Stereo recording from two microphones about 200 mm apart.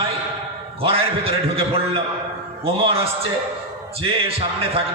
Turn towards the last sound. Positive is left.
turn(degrees=-30)  # may be behind; listen again after turning